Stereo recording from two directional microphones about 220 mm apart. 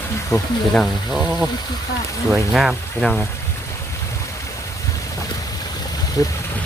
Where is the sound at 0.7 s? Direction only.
Centre (ahead or behind).